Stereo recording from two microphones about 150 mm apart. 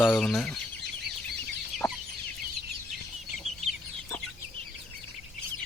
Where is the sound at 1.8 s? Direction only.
Centre (ahead or behind).